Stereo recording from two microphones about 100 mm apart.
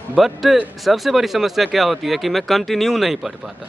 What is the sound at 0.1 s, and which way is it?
Speech, centre (ahead or behind).